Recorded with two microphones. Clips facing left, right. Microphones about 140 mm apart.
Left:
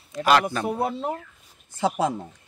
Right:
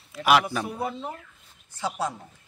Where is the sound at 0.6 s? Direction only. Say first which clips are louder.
Left 5 dB; 60° left (ahead or behind).